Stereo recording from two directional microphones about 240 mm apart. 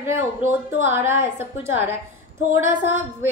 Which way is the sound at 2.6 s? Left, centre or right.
Right.